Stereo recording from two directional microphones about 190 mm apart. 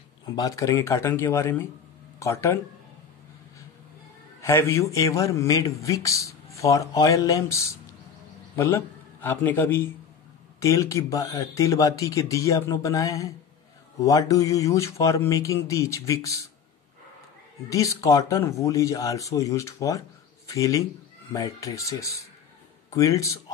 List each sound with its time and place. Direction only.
0.2 s a man's voice: 20° left (ahead or behind)
4.4 s a man's voice: 15° left (ahead or behind)
17.6 s a man's voice: 15° left (ahead or behind)